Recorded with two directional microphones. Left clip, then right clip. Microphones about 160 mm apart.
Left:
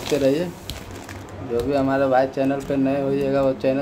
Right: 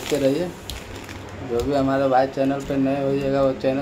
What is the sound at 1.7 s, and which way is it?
Speech, 5° left (ahead or behind).